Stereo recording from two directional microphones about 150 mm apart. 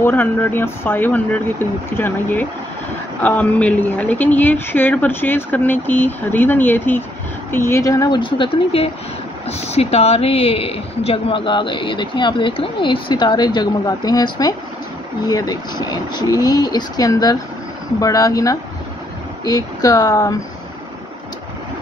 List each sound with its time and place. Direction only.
0.0 s speech: 15° left (ahead or behind)
8.2 s speech: 35° left (ahead or behind)